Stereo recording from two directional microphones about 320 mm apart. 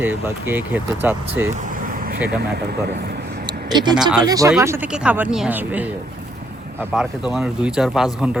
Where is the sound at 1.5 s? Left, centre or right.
Right.